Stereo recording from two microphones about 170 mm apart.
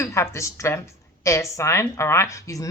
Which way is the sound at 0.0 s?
15° left (ahead or behind).